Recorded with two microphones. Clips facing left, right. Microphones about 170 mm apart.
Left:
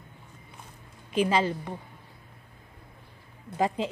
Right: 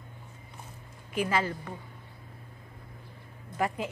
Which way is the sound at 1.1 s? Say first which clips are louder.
Left 4 dB; 20° left (ahead or behind).